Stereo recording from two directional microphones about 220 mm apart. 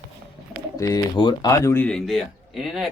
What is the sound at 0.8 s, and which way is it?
Speech, 15° left (ahead or behind).